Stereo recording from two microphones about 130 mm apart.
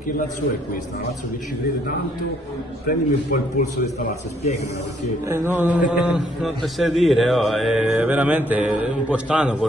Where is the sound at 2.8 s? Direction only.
90° left.